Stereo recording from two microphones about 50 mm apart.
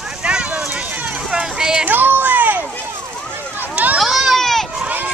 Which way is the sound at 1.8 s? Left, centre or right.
Right.